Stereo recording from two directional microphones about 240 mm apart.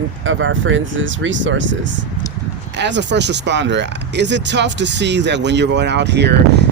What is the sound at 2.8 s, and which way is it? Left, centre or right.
Speech, right.